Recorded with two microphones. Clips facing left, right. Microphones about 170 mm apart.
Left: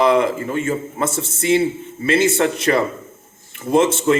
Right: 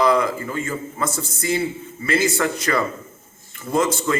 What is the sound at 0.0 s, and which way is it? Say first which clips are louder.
A man's voice: left 3 dB; 25° left (ahead or behind).